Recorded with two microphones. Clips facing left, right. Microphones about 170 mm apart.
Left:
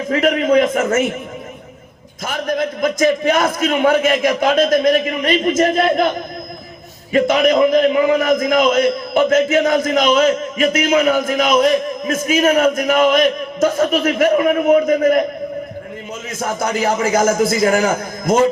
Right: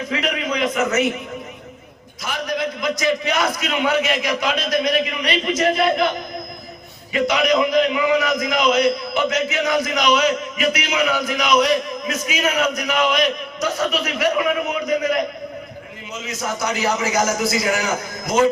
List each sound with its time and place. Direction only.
0.1 s a man's voice: 45° left (ahead or behind)
2.2 s a man's voice: 50° left (ahead or behind)
16.3 s a man's voice: 50° left (ahead or behind)